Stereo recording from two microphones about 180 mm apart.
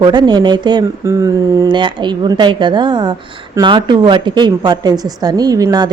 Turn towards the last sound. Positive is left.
turn(degrees=-20)  # may be behind; listen again after turning